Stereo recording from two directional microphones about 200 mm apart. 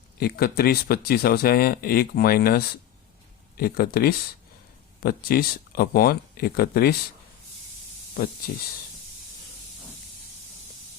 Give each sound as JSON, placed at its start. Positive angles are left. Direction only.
{"t": 0.2, "sound": "speech", "side_deg": 50}